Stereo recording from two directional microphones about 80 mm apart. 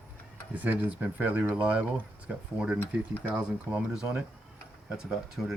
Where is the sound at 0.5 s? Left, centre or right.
Right.